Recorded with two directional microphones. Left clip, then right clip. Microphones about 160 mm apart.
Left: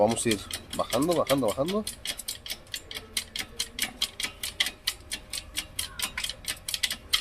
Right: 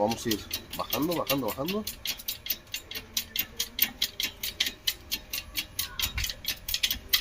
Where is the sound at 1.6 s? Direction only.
45° left (ahead or behind).